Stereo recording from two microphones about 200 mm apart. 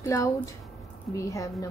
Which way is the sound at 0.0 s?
15° left (ahead or behind).